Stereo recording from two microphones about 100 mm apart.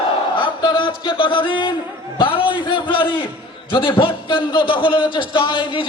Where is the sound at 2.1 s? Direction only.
60° left (ahead or behind).